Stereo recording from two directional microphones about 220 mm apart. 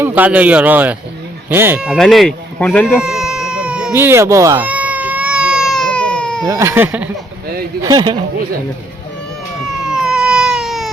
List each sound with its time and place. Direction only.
0.0 s speech: 5° right (ahead or behind)
3.0 s cat: 5° right (ahead or behind)
6.5 s speech: 10° right (ahead or behind)
9.8 s baby cry: centre (ahead or behind)